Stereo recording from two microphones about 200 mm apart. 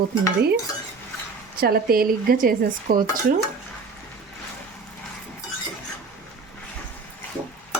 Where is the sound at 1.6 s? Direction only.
50° right (ahead or behind).